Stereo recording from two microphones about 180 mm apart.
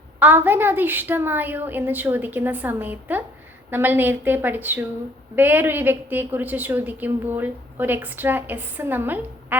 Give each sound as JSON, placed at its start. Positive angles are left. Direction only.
{"t": 0.2, "sound": "a woman's voice", "side_deg": -10}